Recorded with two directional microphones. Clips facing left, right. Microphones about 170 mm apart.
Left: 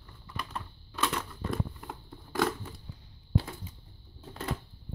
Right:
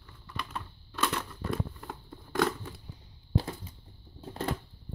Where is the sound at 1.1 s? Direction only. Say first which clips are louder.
Even; centre (ahead or behind).